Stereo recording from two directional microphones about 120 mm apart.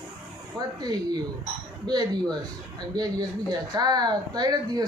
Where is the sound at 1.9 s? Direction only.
35° right (ahead or behind).